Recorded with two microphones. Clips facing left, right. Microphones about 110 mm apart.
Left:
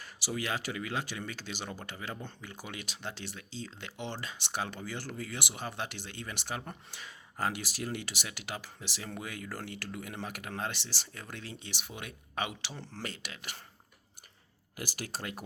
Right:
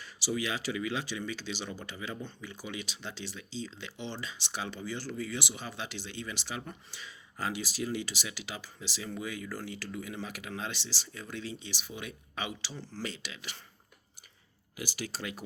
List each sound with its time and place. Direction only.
0.0 s speech: 50° left (ahead or behind)
14.8 s speech: 50° left (ahead or behind)